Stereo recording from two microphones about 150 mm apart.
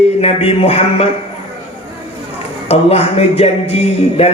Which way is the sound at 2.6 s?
45° left (ahead or behind).